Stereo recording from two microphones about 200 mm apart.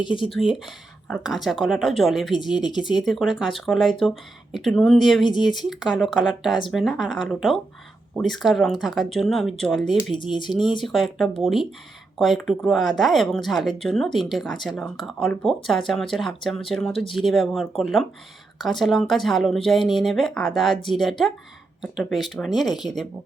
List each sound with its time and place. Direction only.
0.0 s speech: 25° left (ahead or behind)
0.3 s speech: centre (ahead or behind)
2.6 s speech: 20° left (ahead or behind)
2.9 s speech: centre (ahead or behind)
5.2 s speech: 20° left (ahead or behind)
5.5 s speech: centre (ahead or behind)
10.2 s speech: 25° left (ahead or behind)
10.8 s speech: centre (ahead or behind)
16.9 s speech: 25° left (ahead or behind)
17.2 s speech: centre (ahead or behind)